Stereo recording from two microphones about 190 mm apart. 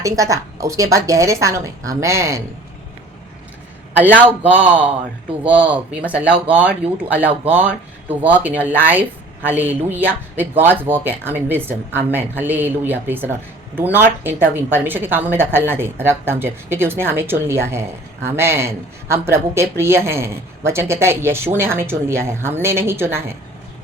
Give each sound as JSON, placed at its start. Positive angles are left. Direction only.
{"t": 0.0, "sound": "speech", "side_deg": -15}
{"t": 3.9, "sound": "speech", "side_deg": -10}
{"t": 8.0, "sound": "speech", "side_deg": -10}